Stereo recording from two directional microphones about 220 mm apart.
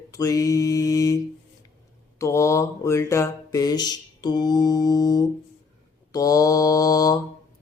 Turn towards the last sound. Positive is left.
turn(degrees=15)  # may be behind; listen again after turning